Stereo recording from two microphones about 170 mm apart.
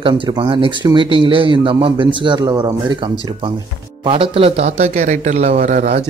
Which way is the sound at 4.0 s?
30° right (ahead or behind).